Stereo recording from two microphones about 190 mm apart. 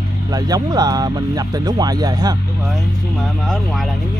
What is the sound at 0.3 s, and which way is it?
Speech, 20° right (ahead or behind).